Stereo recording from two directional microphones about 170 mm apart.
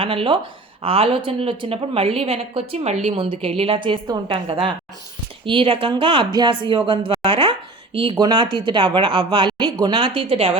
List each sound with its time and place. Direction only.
0.0 s a woman's voice: 30° right (ahead or behind)